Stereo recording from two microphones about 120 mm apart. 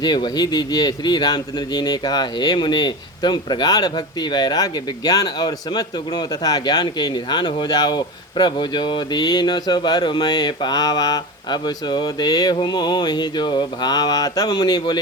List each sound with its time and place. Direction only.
0.0 s speech: 35° left (ahead or behind)